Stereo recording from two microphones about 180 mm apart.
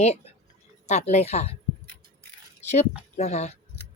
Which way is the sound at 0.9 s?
40° left (ahead or behind).